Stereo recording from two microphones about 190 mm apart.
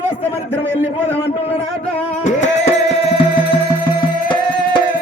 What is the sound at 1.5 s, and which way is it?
Music, 30° left (ahead or behind).